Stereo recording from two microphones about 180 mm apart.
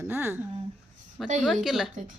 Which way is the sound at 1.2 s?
Centre (ahead or behind).